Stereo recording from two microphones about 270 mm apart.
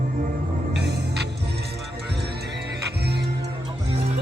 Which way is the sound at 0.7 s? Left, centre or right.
Right.